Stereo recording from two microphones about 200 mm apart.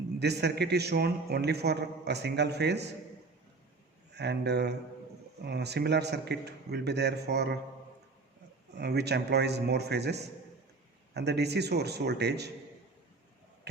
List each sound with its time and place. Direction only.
0.2 s a man's voice: 55° right (ahead or behind)
4.1 s a man's voice: 55° right (ahead or behind)
8.8 s a man's voice: 55° right (ahead or behind)